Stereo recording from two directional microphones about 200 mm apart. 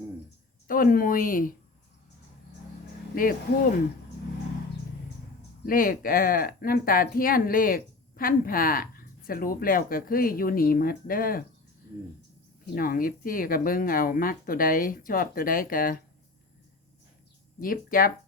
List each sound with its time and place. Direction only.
0.7 s speech: 45° left (ahead or behind)
3.2 s speech: 40° left (ahead or behind)
5.6 s speech: 45° left (ahead or behind)
12.7 s speech: 45° left (ahead or behind)
17.6 s speech: 45° left (ahead or behind)